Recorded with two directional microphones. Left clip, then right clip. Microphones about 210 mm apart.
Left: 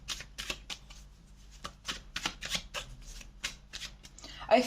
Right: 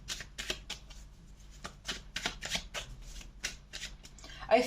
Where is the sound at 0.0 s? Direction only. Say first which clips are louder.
Left 1 dB; 30° left (ahead or behind).